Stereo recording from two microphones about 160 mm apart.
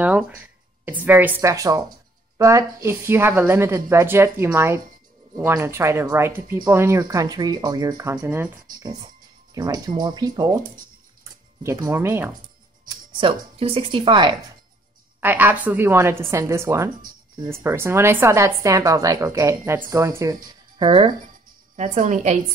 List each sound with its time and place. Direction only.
0.0 s a woman's voice: 5° right (ahead or behind); by 10.6 s 25° right (ahead or behind)
11.6 s a woman's voice: 20° right (ahead or behind)
12.8 s speech: 35° right (ahead or behind)
15.1 s a woman's voice: 10° right (ahead or behind)
20.7 s speech: 30° right (ahead or behind)
21.7 s a woman's voice: 50° right (ahead or behind)